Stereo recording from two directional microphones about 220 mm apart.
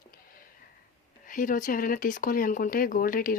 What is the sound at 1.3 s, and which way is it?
A woman's voice, 35° left (ahead or behind).